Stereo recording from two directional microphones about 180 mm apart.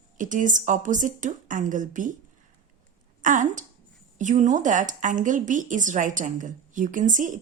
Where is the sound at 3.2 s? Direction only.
45° right (ahead or behind).